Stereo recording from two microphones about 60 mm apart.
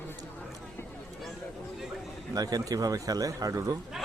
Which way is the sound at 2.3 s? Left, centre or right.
Right.